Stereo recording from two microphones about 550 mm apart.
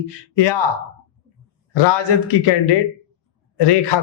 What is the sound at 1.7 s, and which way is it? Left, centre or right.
Speech, left.